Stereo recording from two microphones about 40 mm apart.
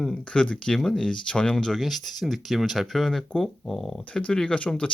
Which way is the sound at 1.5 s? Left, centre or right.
Centre.